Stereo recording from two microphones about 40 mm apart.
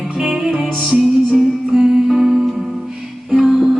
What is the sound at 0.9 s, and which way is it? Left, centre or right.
Music, right.